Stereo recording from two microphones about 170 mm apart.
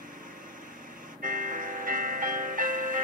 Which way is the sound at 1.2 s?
50° right (ahead or behind).